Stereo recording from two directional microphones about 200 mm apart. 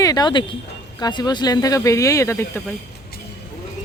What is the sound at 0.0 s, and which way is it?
Speech, 20° left (ahead or behind).